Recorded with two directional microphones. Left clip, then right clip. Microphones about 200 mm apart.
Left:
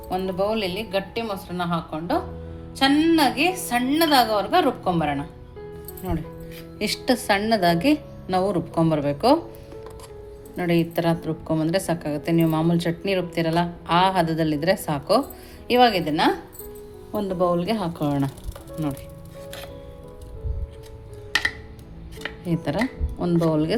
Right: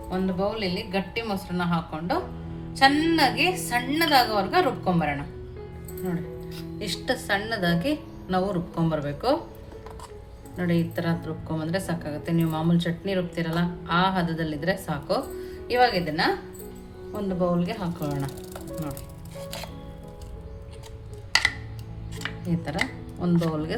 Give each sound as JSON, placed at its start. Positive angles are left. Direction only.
{"t": 0.1, "sound": "speech", "side_deg": 50}
{"t": 0.9, "sound": "a woman's voice", "side_deg": 35}
{"t": 6.7, "sound": "a woman's voice", "side_deg": 35}
{"t": 10.6, "sound": "a woman's voice", "side_deg": 40}
{"t": 22.4, "sound": "a woman's voice", "side_deg": 35}